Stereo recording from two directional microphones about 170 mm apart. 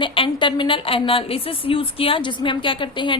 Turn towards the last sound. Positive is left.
turn(degrees=30)  # may be behind; listen again after turning